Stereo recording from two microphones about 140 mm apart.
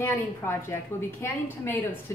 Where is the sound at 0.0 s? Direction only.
15° left (ahead or behind).